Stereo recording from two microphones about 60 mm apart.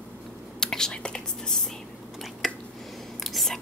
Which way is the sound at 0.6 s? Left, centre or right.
Centre.